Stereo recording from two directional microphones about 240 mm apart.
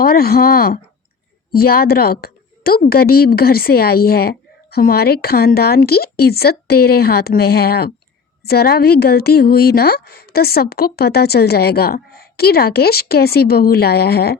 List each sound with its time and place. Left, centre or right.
0.0 s a woman's voice: left